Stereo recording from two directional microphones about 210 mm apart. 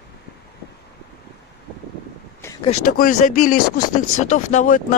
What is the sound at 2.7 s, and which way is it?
Speech, 40° left (ahead or behind).